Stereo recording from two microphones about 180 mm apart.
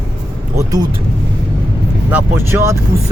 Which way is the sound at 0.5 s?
20° right (ahead or behind).